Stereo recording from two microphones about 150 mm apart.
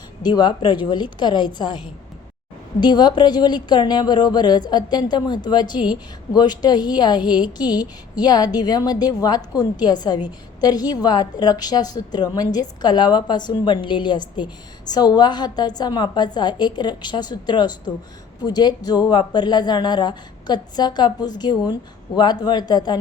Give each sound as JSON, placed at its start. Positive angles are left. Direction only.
{"t": 0.2, "sound": "a woman's voice", "side_deg": 30}
{"t": 2.8, "sound": "speech", "side_deg": 30}